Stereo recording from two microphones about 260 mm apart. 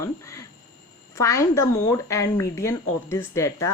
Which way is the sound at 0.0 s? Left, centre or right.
Centre.